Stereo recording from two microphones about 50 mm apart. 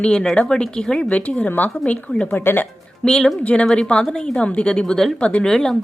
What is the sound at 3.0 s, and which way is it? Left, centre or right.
A woman's voice, centre.